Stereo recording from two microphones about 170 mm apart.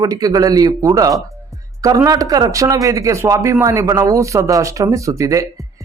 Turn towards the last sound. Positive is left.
turn(degrees=-20)  # may be behind; listen again after turning